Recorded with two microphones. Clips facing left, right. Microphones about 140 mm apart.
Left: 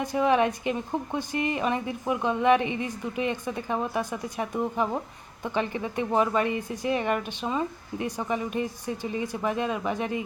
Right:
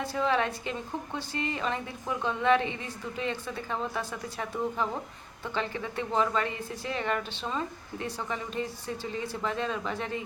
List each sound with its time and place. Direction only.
0.0 s speech: 15° left (ahead or behind)